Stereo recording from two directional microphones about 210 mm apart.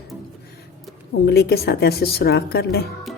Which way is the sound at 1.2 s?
50° left (ahead or behind).